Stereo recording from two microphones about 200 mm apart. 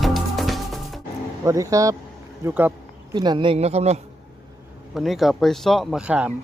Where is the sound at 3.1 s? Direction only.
20° right (ahead or behind).